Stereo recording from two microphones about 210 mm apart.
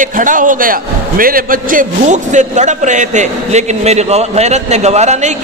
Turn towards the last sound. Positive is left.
turn(degrees=-35)  # may be behind; listen again after turning